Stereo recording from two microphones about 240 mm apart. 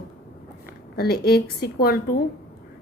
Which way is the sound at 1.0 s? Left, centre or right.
Left.